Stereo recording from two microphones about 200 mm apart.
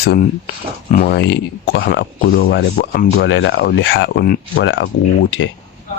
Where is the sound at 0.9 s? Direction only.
45° left (ahead or behind).